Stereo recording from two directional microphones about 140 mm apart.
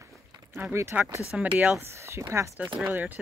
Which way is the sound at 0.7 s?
15° right (ahead or behind).